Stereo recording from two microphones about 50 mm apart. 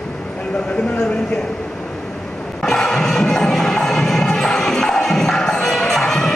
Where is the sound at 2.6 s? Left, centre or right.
Centre.